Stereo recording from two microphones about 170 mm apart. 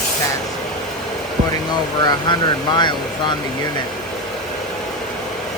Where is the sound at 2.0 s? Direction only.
25° left (ahead or behind).